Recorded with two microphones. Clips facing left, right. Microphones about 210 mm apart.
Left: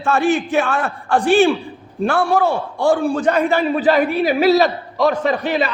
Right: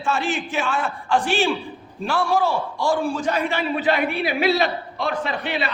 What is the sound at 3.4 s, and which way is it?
A man's voice, 40° left (ahead or behind).